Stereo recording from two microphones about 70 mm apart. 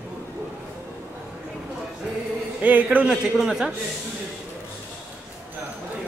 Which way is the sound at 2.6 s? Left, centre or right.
Right.